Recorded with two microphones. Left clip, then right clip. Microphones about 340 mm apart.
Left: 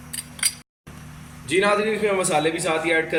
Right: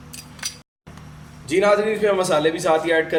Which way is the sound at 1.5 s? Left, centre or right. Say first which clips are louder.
Right 3 dB; right.